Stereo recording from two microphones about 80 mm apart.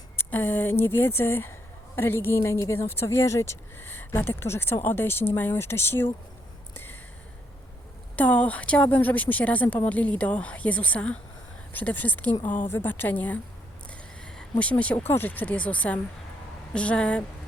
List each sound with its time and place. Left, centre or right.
0.2 s a woman's voice: left
3.8 s a woman's voice: left
8.1 s a woman's voice: centre
14.6 s speech: centre
14.9 s a woman's voice: left; by 17.2 s centre